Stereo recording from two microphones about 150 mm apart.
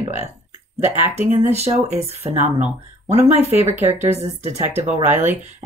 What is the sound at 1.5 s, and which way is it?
Speech, 45° right (ahead or behind).